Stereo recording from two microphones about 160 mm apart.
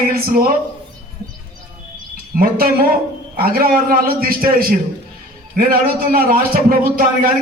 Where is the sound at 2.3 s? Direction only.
60° right (ahead or behind).